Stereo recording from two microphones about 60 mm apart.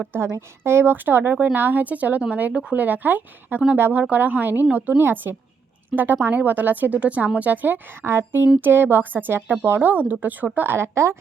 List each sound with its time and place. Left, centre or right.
0.1 s speech: right
2.5 s speech: centre
2.7 s speech: right
4.0 s speech: right